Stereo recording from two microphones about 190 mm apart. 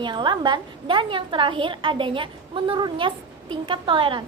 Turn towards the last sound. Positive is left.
turn(degrees=-25)  # may be behind; listen again after turning